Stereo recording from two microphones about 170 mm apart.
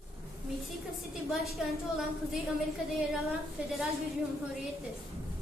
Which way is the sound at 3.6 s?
5° right (ahead or behind).